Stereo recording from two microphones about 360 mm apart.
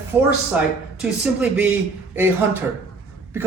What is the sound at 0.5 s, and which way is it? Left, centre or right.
Speech, centre.